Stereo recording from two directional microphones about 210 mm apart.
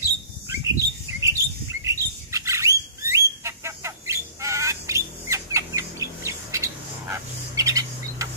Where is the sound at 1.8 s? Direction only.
15° right (ahead or behind).